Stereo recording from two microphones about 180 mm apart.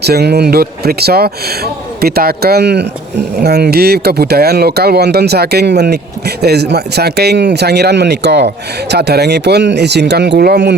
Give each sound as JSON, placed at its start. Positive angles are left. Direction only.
{"t": 0.0, "sound": "speech", "side_deg": -65}